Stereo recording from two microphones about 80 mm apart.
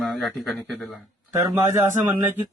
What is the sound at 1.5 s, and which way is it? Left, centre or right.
Speech, right.